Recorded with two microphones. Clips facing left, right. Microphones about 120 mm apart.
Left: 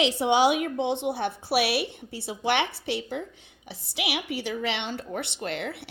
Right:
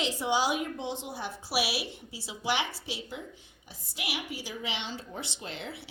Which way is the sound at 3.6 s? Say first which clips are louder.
Left 7 dB; 75° left (ahead or behind).